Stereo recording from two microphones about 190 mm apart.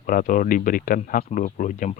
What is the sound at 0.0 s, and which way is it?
Speech, 45° left (ahead or behind).